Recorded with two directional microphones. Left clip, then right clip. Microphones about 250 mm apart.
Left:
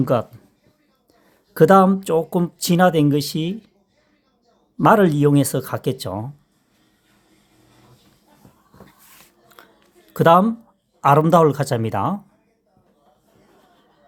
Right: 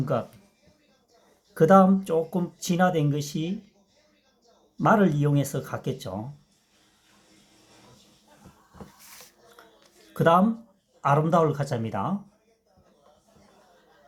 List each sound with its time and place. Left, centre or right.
0.0 s speech: left
1.5 s speech: left
4.8 s speech: left
9.6 s a sound: left
10.1 s speech: left